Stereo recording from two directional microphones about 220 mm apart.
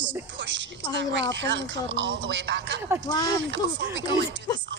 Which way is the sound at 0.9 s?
55° right (ahead or behind).